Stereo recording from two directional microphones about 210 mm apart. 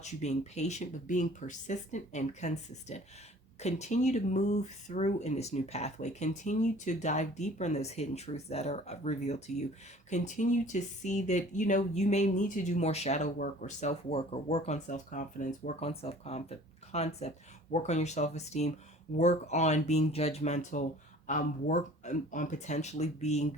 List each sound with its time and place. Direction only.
0.0 s speech: 35° left (ahead or behind)